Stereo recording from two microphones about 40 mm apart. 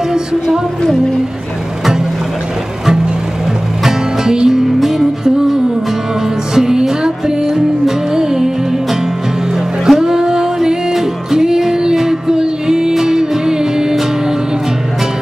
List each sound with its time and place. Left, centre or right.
0.1 s a sound: centre
3.8 s music: centre
9.8 s music: centre